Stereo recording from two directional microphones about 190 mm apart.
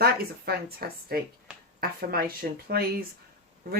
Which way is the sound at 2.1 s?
55° right (ahead or behind).